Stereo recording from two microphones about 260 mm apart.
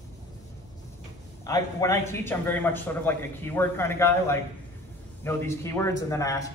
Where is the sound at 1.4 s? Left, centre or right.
Centre.